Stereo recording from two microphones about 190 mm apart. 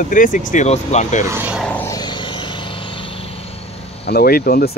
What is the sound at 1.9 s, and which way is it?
Vehicle, 25° left (ahead or behind).